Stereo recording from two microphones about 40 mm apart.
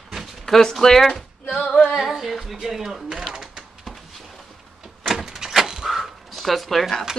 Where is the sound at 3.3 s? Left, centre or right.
Centre.